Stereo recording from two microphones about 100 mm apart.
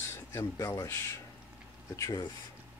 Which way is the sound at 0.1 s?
25° left (ahead or behind).